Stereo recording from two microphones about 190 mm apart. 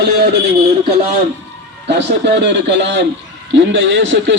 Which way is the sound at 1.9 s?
65° right (ahead or behind).